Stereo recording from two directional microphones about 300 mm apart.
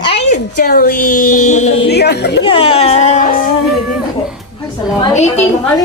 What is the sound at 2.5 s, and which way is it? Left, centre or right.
Speech, centre.